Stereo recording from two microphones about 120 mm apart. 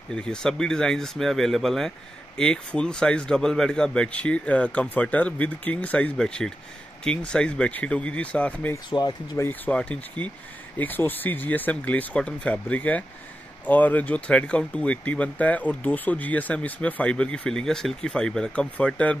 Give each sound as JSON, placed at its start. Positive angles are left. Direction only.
{"t": 0.1, "sound": "speech", "side_deg": 5}
{"t": 8.7, "sound": "speech", "side_deg": 35}
{"t": 9.4, "sound": "speech", "side_deg": 15}